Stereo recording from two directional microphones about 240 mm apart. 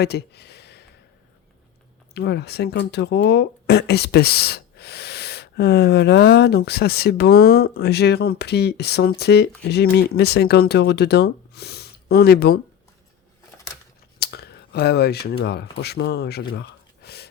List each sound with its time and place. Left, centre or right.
0.0 s a sound: left
2.1 s speech: left
14.2 s speech: left